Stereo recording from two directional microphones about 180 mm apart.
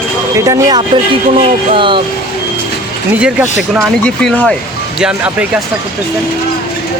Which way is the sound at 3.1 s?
5° right (ahead or behind).